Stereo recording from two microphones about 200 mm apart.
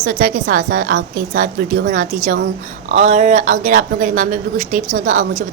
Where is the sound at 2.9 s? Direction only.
35° right (ahead or behind).